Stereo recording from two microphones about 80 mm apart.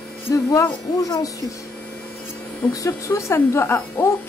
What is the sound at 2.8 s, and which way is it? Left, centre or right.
Speech, left.